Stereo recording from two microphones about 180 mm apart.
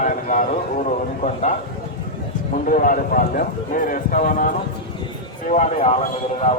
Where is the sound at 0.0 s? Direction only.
45° left (ahead or behind).